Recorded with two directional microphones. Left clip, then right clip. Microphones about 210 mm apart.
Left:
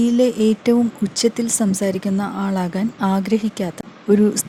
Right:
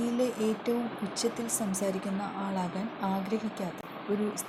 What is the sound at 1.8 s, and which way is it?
A woman's voice, 40° left (ahead or behind).